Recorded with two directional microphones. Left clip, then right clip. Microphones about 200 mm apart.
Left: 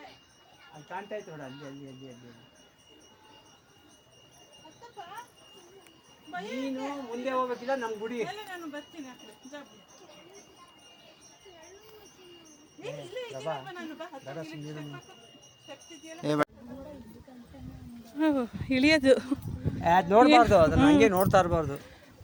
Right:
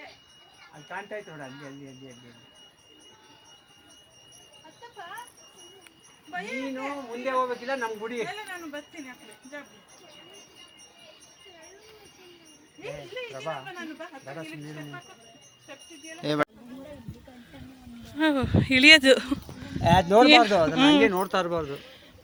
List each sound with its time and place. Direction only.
0.9 s speech: 20° left (ahead or behind)
6.3 s speech: 5° right (ahead or behind)
6.7 s speech: 10° left (ahead or behind)
7.5 s speech: centre (ahead or behind)
7.8 s speech: 20° left (ahead or behind)
12.8 s speech: 15° left (ahead or behind)
13.5 s speech: 5° left (ahead or behind)
18.2 s speech: centre (ahead or behind)
19.8 s speech: 30° right (ahead or behind)
20.2 s speech: centre (ahead or behind)
21.0 s speech: 35° left (ahead or behind)
21.2 s speech: 55° left (ahead or behind)